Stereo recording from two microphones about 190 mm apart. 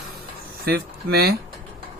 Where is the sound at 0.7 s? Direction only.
55° right (ahead or behind).